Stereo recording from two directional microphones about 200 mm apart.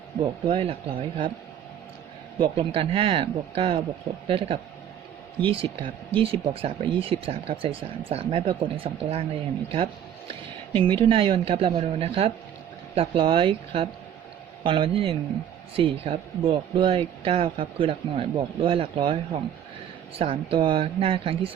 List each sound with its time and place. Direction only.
0.4 s speech: 30° right (ahead or behind)
2.4 s speech: 30° right (ahead or behind)